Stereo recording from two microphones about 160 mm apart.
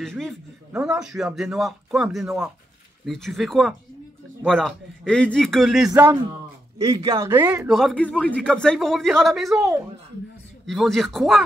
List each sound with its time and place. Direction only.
0.0 s a man's voice: centre (ahead or behind)
6.8 s speech: 20° right (ahead or behind)
7.6 s a man's voice: centre (ahead or behind)